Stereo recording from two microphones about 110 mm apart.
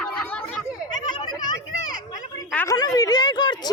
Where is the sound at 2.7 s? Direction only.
35° left (ahead or behind).